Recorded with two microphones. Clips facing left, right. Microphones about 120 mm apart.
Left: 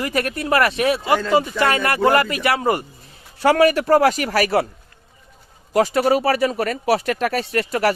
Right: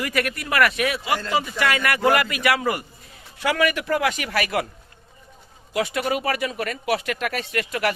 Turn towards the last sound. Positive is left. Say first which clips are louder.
# left 5 dB
turn(degrees=35)  # may be behind; listen again after turning